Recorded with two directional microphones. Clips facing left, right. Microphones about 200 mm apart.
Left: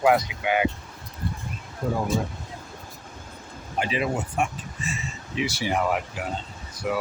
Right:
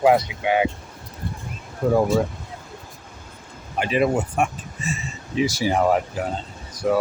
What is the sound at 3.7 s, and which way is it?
Speech, 55° right (ahead or behind).